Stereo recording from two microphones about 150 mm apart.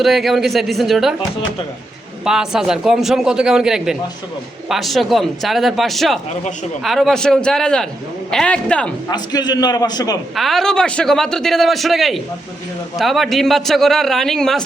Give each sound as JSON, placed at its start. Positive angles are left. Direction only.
{"t": 0.0, "sound": "a man's voice", "side_deg": 0}
{"t": 2.2, "sound": "a man's voice", "side_deg": -5}
{"t": 9.0, "sound": "a man's voice", "side_deg": 25}
{"t": 10.3, "sound": "a man's voice", "side_deg": 0}